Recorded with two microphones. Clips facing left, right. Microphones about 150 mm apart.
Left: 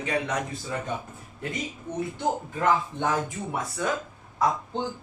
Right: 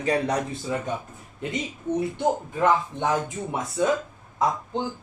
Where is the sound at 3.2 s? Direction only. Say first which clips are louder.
Right 2 dB; 20° right (ahead or behind).